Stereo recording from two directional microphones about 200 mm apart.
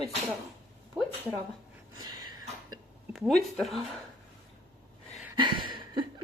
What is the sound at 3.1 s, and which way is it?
Speech, centre (ahead or behind).